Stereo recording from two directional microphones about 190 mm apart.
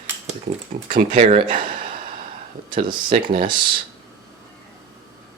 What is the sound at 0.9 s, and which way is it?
Speech, 40° right (ahead or behind).